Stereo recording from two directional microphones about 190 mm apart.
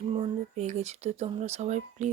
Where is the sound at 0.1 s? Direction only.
35° right (ahead or behind).